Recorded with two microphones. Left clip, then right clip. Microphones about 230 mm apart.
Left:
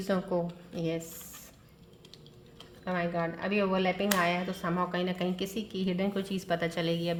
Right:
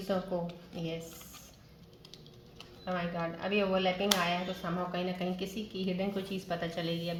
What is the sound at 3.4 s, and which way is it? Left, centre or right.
Speech, left.